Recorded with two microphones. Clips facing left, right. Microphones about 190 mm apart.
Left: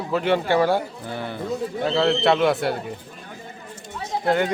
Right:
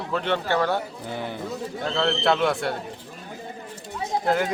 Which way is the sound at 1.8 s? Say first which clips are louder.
Left 3 dB; 5° left (ahead or behind).